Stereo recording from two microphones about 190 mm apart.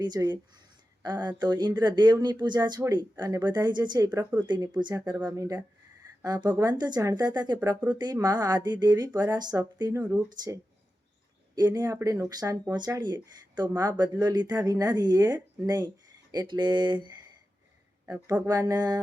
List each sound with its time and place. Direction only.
0.0 s speech: 20° right (ahead or behind)
10.0 s speech: 10° right (ahead or behind)
10.2 s speech: 20° right (ahead or behind)
18.0 s speech: 10° right (ahead or behind)